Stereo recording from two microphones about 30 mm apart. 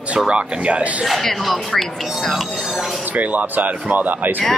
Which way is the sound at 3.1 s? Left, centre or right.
Right.